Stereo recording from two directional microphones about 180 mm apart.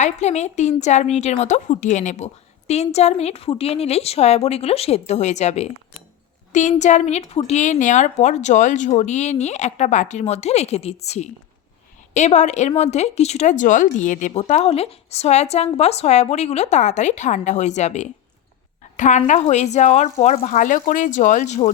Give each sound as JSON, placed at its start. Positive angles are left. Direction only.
{"t": 0.0, "sound": "speech", "side_deg": 40}